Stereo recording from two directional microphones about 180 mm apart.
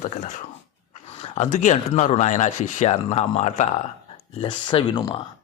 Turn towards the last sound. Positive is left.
turn(degrees=25)  # may be behind; listen again after turning